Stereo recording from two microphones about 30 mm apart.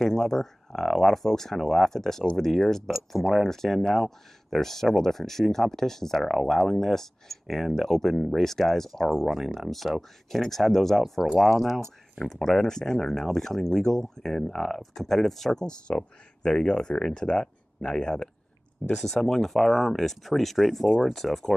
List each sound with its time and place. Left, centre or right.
0.0 s speech: centre
12.3 s speech: centre
15.5 s speech: left
18.9 s speech: centre
20.5 s speech: centre
21.0 s speech: centre